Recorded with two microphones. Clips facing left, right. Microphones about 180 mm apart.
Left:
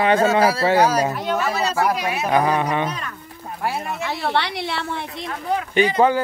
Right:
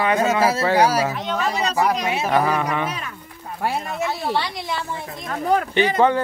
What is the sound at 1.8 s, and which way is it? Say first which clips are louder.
Speech: right 1 dB; 5° left (ahead or behind).